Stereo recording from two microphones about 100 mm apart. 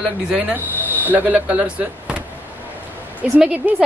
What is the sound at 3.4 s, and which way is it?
Speech, 5° right (ahead or behind).